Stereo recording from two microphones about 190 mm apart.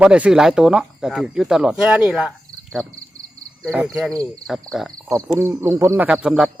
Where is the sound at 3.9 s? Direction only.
Centre (ahead or behind).